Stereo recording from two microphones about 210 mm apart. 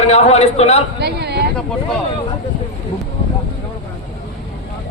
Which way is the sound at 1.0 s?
50° right (ahead or behind).